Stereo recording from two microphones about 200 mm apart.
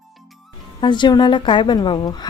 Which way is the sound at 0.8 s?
20° left (ahead or behind).